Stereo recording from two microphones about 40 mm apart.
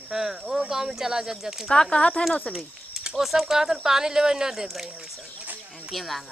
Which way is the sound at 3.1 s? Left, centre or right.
Centre.